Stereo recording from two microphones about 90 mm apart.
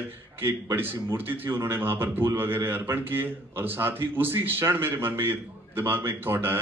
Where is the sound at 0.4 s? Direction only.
25° right (ahead or behind).